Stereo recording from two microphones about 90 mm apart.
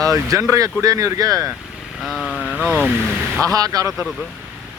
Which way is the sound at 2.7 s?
10° right (ahead or behind).